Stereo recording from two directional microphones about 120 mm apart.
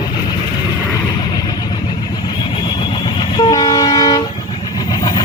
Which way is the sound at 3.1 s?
35° left (ahead or behind).